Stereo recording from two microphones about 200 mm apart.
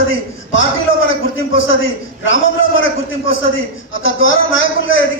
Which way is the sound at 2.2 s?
75° left (ahead or behind).